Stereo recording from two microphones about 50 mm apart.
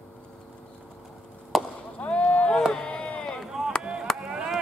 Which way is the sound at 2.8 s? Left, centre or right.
Centre.